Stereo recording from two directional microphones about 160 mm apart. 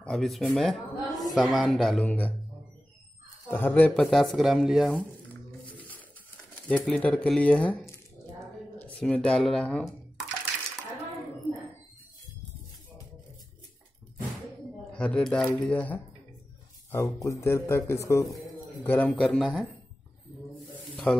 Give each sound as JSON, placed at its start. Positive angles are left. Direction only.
{"t": 0.0, "sound": "speech", "side_deg": 0}
{"t": 3.4, "sound": "speech", "side_deg": 10}
{"t": 4.9, "sound": "a sound", "side_deg": 10}
{"t": 6.7, "sound": "a man's voice", "side_deg": 10}
{"t": 14.9, "sound": "a man's voice", "side_deg": 5}
{"t": 16.9, "sound": "a man's voice", "side_deg": 20}
{"t": 18.9, "sound": "speech", "side_deg": 5}
{"t": 20.9, "sound": "snake", "side_deg": 5}